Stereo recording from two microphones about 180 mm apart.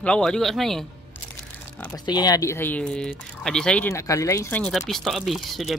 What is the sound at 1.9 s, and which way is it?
Speech, 20° left (ahead or behind).